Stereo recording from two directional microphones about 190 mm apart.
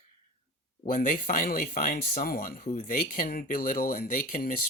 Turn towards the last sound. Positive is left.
turn(degrees=45)  # may be behind; listen again after turning